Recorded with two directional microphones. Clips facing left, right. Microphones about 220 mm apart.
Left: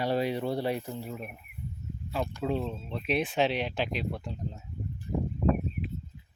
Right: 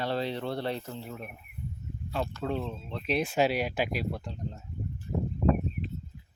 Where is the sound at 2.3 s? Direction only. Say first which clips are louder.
Left 2 dB; 10° left (ahead or behind).